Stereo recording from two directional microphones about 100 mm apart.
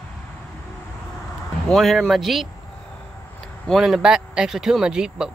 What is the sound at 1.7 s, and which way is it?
Speech, centre (ahead or behind).